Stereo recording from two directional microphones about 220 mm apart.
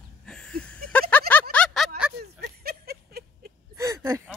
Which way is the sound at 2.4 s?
45° right (ahead or behind).